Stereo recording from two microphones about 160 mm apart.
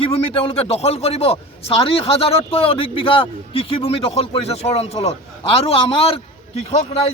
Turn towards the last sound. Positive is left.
turn(degrees=45)  # may be behind; listen again after turning